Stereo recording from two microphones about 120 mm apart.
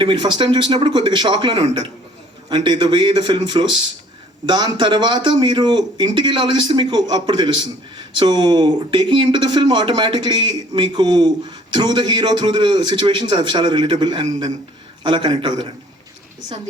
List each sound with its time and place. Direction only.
0.0 s a man's voice: 45° right (ahead or behind)